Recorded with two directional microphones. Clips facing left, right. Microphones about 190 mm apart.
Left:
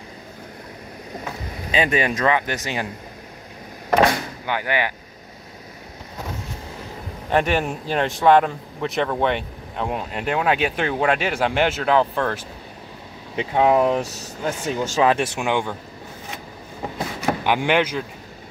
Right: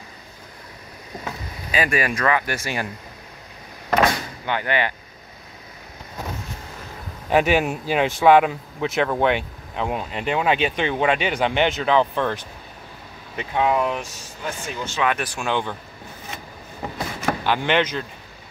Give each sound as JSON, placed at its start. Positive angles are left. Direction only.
{"t": 1.7, "sound": "speech", "side_deg": 25}
{"t": 4.5, "sound": "speech", "side_deg": 10}
{"t": 7.2, "sound": "speech", "side_deg": -5}
{"t": 13.4, "sound": "speech", "side_deg": 30}
{"t": 15.1, "sound": "speech", "side_deg": 20}
{"t": 17.3, "sound": "speech", "side_deg": 15}